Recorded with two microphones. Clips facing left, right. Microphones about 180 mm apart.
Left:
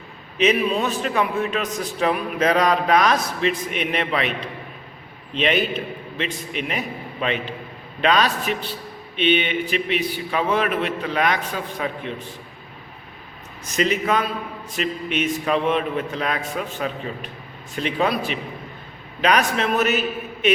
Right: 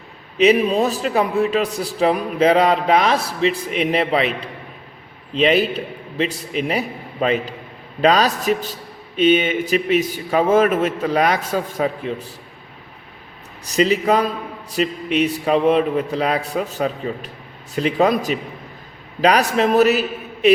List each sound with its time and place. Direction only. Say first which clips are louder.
0.4 s a man's voice: right 5 dB; 40° right (ahead or behind)
13.7 s a man's voice: right 5 dB; 35° right (ahead or behind)